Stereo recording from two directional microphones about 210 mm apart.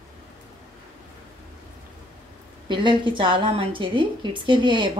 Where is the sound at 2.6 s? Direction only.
20° right (ahead or behind).